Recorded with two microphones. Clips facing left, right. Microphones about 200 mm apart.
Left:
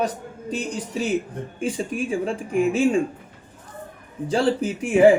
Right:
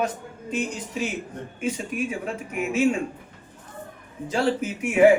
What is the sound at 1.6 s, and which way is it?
A man's voice, 30° left (ahead or behind).